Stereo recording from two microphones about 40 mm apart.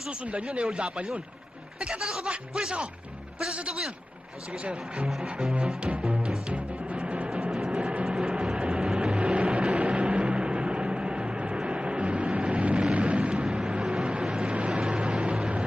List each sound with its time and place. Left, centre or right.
0.1 s speech: right
1.8 s speech: centre
4.6 s speech: right
5.2 s speech: centre
6.1 s music: right
6.5 s timpani: right
7.7 s train: right
8.3 s train: centre
8.5 s vehicle: right
9.1 s vehicle: right
13.3 s vehicle: centre